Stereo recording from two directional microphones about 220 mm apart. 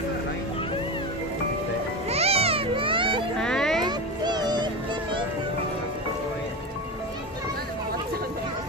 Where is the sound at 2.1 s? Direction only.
30° right (ahead or behind).